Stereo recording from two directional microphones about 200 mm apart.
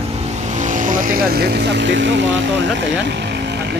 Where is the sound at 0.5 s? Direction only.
40° right (ahead or behind); by 2.4 s 65° right (ahead or behind).